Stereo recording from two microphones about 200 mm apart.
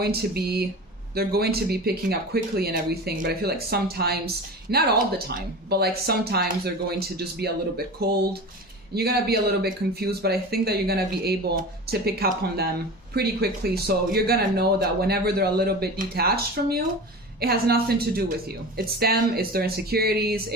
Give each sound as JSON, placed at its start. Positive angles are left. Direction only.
{"t": 0.0, "sound": "speech", "side_deg": -50}